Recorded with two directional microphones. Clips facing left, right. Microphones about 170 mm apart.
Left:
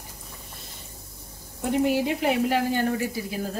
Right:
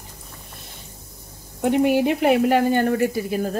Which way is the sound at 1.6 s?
65° right (ahead or behind).